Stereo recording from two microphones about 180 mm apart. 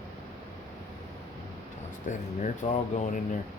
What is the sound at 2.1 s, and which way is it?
Speech, 45° left (ahead or behind).